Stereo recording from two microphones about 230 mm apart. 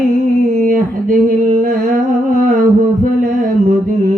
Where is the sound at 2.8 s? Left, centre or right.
Right.